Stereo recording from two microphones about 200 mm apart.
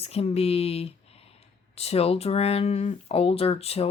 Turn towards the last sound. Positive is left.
turn(degrees=30)  # may be behind; listen again after turning